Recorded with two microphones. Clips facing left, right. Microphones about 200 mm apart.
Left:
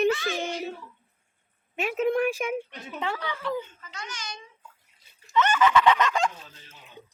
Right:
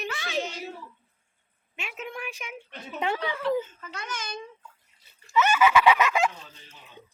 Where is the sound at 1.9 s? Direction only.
50° left (ahead or behind).